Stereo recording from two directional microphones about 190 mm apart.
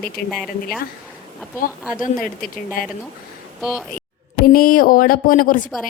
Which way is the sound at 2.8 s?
50° left (ahead or behind).